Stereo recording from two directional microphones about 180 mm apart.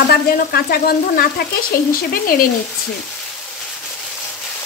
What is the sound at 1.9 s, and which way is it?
Speech, 55° left (ahead or behind).